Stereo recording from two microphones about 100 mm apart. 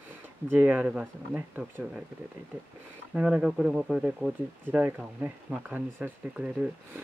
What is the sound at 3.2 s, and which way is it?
Speech, 10° right (ahead or behind).